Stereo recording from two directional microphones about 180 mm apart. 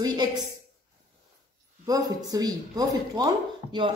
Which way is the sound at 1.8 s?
20° right (ahead or behind).